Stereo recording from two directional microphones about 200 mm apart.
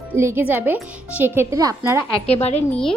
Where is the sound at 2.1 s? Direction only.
30° left (ahead or behind).